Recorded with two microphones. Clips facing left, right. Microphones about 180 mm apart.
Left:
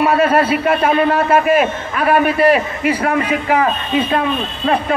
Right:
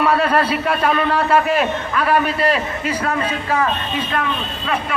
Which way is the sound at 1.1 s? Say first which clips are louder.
Left 3 dB; 50° left (ahead or behind).